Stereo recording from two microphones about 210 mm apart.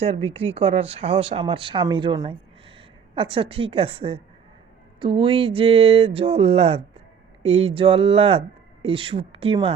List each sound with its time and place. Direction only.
0.1 s speech: 30° right (ahead or behind)